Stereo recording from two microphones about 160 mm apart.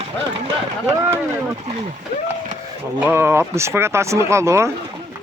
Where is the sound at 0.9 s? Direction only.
15° right (ahead or behind).